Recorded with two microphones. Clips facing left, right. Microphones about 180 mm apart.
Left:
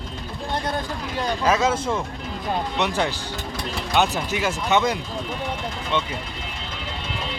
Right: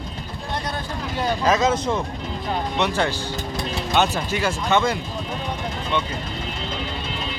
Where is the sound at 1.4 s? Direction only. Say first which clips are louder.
Right 1 dB; 10° left (ahead or behind).